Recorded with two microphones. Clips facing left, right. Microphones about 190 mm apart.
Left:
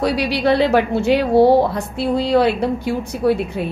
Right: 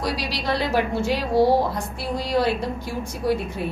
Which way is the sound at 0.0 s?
65° left (ahead or behind).